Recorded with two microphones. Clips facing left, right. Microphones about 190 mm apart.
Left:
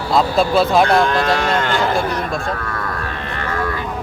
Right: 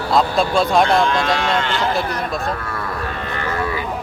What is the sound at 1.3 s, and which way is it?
Speech, 50° left (ahead or behind).